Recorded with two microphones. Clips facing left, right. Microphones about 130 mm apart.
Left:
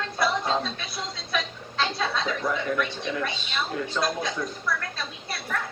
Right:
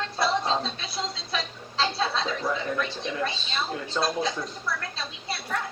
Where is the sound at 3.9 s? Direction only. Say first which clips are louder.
Right 4 dB; 30° right (ahead or behind).